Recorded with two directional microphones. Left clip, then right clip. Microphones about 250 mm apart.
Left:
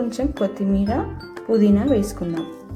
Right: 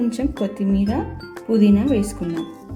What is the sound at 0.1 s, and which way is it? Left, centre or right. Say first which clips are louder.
Speech: left 1 dB; centre.